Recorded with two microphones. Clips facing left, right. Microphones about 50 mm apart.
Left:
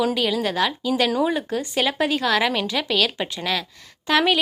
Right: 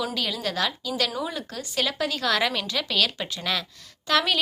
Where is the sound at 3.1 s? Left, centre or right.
Left.